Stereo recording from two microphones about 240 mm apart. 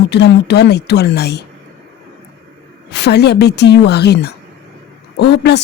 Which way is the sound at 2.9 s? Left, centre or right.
Left.